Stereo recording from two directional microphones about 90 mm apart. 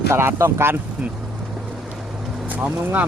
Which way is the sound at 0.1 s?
30° right (ahead or behind).